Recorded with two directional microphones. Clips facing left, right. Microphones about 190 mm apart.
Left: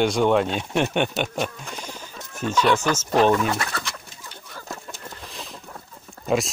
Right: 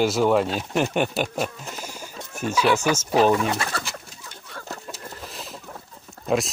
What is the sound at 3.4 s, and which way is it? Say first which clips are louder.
Speech: even; 30° right (ahead or behind).